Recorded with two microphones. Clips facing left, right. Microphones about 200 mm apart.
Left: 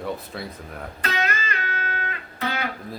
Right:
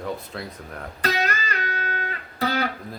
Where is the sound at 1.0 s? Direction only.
35° right (ahead or behind).